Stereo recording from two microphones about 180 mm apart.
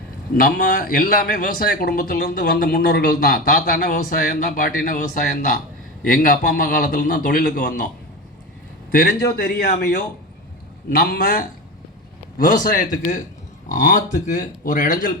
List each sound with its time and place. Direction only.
0.3 s speech: 50° left (ahead or behind)
8.9 s a man's voice: 55° left (ahead or behind)
10.8 s a man's voice: 60° left (ahead or behind)
12.5 s speech: 50° left (ahead or behind)